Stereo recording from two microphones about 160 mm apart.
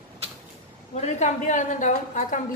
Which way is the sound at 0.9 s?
45° left (ahead or behind).